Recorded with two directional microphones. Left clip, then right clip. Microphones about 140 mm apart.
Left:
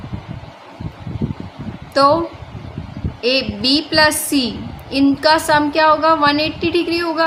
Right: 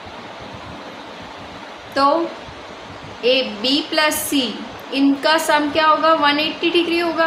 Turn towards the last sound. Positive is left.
turn(degrees=35)  # may be behind; listen again after turning